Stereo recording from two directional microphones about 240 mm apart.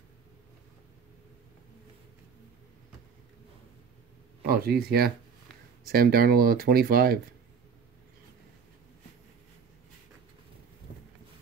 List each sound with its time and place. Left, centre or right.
4.4 s speech: right